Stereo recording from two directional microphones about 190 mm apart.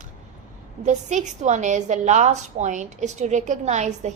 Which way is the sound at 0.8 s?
40° right (ahead or behind).